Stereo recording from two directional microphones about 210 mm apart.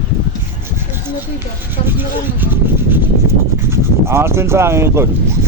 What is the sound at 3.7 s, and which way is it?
Speech, 10° right (ahead or behind).